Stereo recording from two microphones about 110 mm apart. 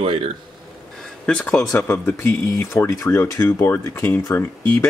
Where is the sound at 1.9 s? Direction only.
20° left (ahead or behind).